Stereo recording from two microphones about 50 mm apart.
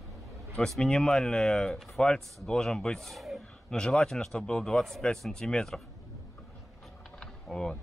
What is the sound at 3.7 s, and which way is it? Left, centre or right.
Speech, centre.